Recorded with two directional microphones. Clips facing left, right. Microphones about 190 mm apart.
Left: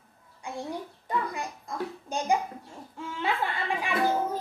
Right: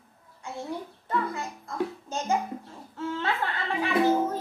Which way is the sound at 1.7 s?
15° left (ahead or behind).